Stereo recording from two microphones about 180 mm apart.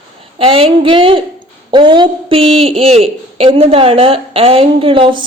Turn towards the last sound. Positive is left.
turn(degrees=-30)  # may be behind; listen again after turning